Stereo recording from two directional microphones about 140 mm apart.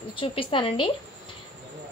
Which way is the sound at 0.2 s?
40° left (ahead or behind).